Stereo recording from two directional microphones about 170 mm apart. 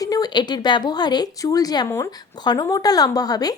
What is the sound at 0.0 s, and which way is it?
Speech, 20° left (ahead or behind).